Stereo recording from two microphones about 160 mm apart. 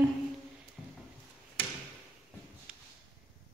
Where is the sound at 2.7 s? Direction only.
5° right (ahead or behind).